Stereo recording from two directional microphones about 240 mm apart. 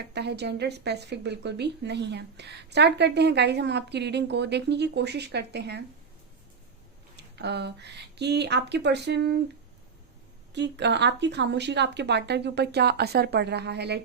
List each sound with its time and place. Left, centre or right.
0.1 s a woman's voice: right
7.2 s a woman's voice: right
10.5 s a woman's voice: right